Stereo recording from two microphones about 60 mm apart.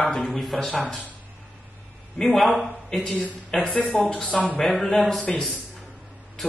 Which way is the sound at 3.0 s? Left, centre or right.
Centre.